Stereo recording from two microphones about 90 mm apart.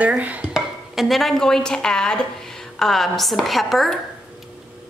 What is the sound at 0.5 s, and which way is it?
Speech, 5° right (ahead or behind).